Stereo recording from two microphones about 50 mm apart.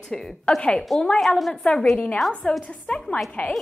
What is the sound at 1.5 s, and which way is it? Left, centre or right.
Speech, centre.